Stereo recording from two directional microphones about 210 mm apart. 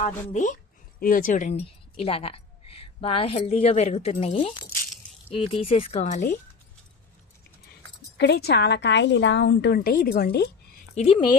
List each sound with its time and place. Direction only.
0.0 s speech: 35° left (ahead or behind)
8.2 s a woman's voice: 50° left (ahead or behind)
10.9 s speech: 30° left (ahead or behind)